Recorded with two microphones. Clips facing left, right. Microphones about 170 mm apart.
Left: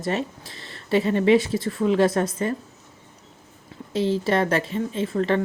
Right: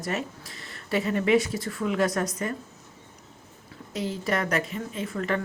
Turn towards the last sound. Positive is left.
turn(degrees=30)  # may be behind; listen again after turning